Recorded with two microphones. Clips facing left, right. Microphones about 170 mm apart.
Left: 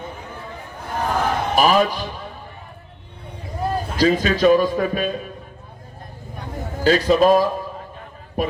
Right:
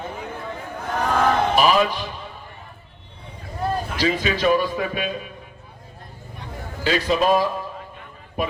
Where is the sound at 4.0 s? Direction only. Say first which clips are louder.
Left 6 dB; 45° left (ahead or behind).